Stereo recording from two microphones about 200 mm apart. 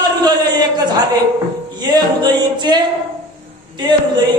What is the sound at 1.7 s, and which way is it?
Music, 20° right (ahead or behind).